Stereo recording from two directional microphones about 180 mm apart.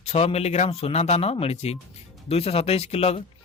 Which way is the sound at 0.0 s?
35° left (ahead or behind).